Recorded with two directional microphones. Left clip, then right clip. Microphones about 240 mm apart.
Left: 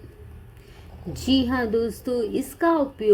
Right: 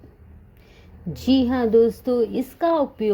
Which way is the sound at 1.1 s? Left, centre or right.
Centre.